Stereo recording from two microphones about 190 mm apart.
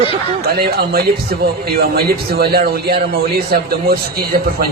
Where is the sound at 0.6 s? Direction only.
55° right (ahead or behind).